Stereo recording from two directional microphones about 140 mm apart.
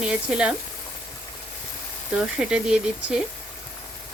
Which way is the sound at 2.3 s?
5° right (ahead or behind).